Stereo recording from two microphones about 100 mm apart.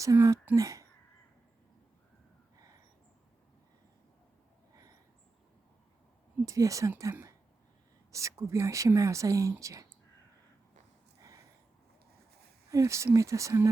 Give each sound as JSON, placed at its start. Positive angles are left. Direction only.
{"t": 0.0, "sound": "speech", "side_deg": -35}
{"t": 4.7, "sound": "a sound", "side_deg": -35}
{"t": 6.4, "sound": "speech", "side_deg": -35}
{"t": 12.7, "sound": "speech", "side_deg": -30}